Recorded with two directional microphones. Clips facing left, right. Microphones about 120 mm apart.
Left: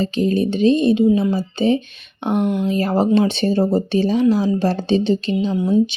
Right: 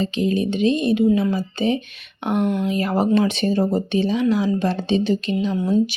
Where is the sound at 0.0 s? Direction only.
40° left (ahead or behind).